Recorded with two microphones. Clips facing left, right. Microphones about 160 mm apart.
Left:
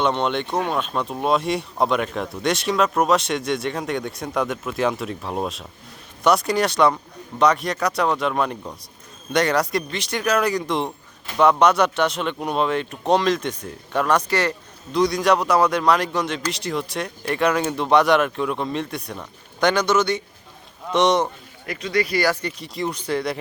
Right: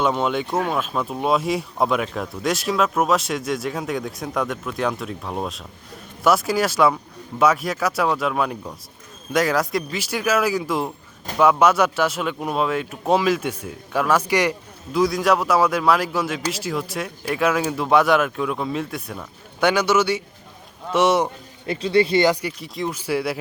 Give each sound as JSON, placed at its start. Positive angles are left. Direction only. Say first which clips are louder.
{"t": 0.0, "sound": "speech", "louder": "even", "side_deg": -5}
{"t": 21.7, "sound": "speech", "louder": "right 5 dB", "side_deg": -30}
{"t": 22.4, "sound": "speech", "louder": "even", "side_deg": 0}